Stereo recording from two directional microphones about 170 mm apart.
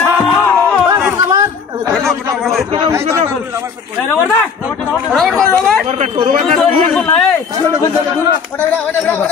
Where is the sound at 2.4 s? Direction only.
Centre (ahead or behind).